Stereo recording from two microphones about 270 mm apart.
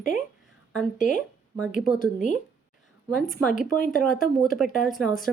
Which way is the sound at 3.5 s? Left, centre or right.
Left.